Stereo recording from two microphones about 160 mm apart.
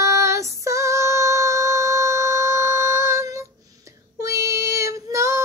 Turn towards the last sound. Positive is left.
turn(degrees=-20)  # may be behind; listen again after turning